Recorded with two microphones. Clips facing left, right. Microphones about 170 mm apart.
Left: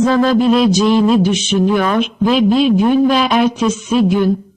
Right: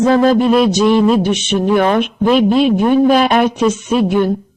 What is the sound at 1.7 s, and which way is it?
Speech, 50° right (ahead or behind).